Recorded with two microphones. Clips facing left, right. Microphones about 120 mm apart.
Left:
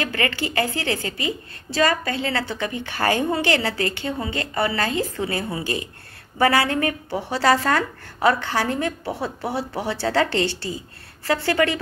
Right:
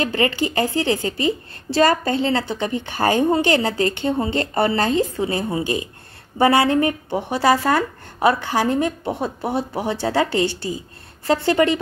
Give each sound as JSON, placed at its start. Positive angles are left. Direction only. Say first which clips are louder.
{"t": 0.0, "sound": "a woman's voice", "louder": "right 5 dB", "side_deg": -25}